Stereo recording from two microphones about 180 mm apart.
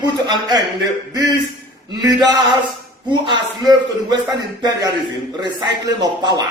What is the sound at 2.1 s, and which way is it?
Speech, 20° right (ahead or behind).